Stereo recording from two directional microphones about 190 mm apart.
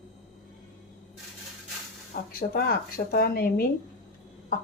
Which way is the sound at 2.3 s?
50° left (ahead or behind).